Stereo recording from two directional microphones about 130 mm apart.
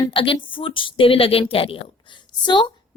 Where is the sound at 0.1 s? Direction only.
40° left (ahead or behind).